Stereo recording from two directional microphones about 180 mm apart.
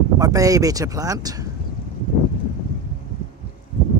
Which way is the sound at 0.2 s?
20° right (ahead or behind).